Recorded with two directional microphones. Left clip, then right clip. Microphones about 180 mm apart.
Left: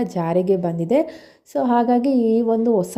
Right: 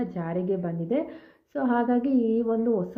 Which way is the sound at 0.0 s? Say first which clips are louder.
Left 10 dB; 40° left (ahead or behind).